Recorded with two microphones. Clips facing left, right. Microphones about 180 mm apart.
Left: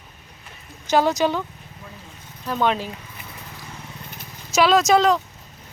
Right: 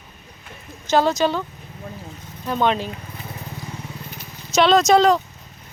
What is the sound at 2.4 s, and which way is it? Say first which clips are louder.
Speech: right 1 dB; centre (ahead or behind).